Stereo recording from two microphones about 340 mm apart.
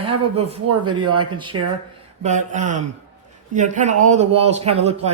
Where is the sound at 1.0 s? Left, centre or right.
Right.